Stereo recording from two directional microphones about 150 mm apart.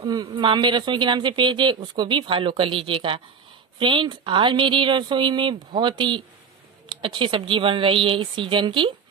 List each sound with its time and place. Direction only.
0.0 s speech: 30° right (ahead or behind)